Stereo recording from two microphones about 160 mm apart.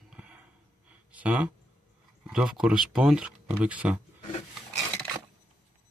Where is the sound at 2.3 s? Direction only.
5° right (ahead or behind).